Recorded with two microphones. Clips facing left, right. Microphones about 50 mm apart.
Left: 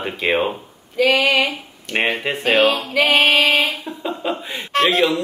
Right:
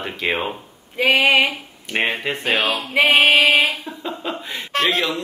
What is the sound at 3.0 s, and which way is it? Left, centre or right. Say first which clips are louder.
Female singing: right 1 dB; centre.